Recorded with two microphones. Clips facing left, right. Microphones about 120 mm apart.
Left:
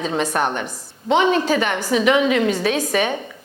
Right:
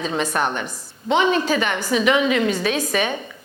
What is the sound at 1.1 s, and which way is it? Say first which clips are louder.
A woman's voice: left 2 dB; 55° left (ahead or behind).